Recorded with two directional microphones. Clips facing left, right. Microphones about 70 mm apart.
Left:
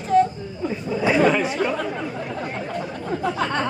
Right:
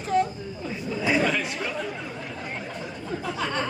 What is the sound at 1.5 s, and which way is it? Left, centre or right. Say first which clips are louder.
Chatter: left 7 dB; left.